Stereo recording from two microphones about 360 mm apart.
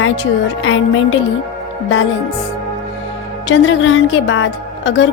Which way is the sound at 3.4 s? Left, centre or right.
Left.